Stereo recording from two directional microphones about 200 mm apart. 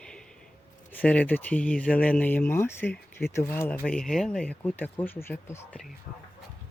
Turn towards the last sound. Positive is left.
turn(degrees=10)  # may be behind; listen again after turning